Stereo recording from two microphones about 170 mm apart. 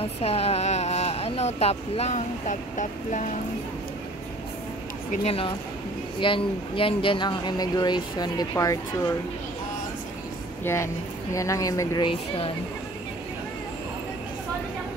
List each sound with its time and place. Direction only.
0.0 s speech: 35° left (ahead or behind)
5.1 s speech: 35° left (ahead or behind); by 8.7 s 20° left (ahead or behind)
10.6 s a woman's voice: 15° left (ahead or behind)